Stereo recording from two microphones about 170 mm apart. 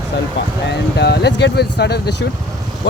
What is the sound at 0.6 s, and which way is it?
Speech, 80° left.